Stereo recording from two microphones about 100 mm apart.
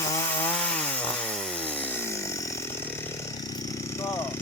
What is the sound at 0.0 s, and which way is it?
Chainsaw, 30° left (ahead or behind).